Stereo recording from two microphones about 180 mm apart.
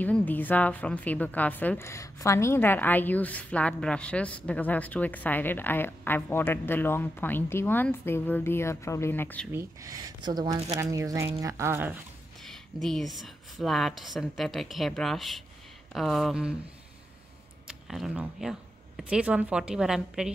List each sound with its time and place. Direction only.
0.0 s a woman's voice: 10° left (ahead or behind)
9.5 s speech: 15° right (ahead or behind)
12.4 s a sound: centre (ahead or behind)
13.6 s speech: centre (ahead or behind)
17.6 s speech: centre (ahead or behind)